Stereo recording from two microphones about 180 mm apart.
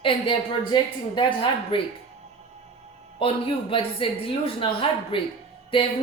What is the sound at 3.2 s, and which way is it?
A woman's voice, 30° left (ahead or behind).